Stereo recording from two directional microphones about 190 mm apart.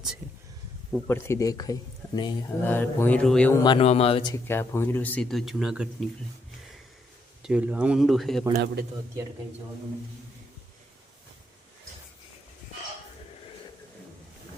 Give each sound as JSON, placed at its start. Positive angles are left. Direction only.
{"t": 0.9, "sound": "speech", "side_deg": 10}
{"t": 3.6, "sound": "speech", "side_deg": 30}
{"t": 4.4, "sound": "speech", "side_deg": 10}
{"t": 7.4, "sound": "speech", "side_deg": -5}
{"t": 8.5, "sound": "a man's voice", "side_deg": -55}